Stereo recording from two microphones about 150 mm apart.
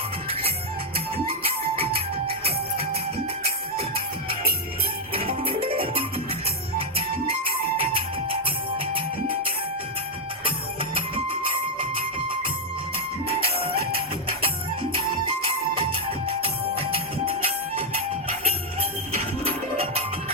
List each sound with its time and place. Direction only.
3.8 s music: 40° right (ahead or behind)
5.5 s music: 40° right (ahead or behind)
7.8 s music: 40° right (ahead or behind)
13.2 s music: 40° right (ahead or behind)
15.8 s music: 40° right (ahead or behind)